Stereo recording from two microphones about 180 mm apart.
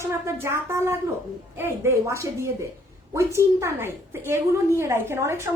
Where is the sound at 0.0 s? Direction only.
15° right (ahead or behind).